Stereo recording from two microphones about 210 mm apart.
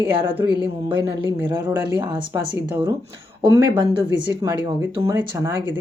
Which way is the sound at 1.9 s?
20° right (ahead or behind).